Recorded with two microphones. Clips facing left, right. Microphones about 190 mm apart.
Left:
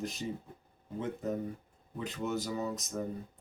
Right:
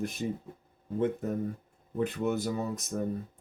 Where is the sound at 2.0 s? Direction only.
55° right (ahead or behind).